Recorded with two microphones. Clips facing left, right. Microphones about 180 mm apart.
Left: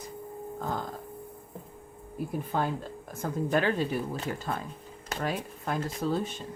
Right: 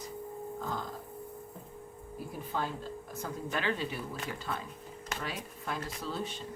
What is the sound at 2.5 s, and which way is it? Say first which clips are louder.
Speech: left 4 dB; 55° left (ahead or behind).